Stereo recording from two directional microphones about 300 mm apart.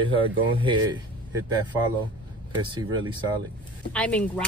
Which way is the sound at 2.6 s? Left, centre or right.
Centre.